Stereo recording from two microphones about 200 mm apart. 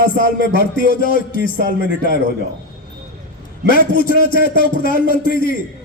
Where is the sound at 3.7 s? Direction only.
45° left (ahead or behind).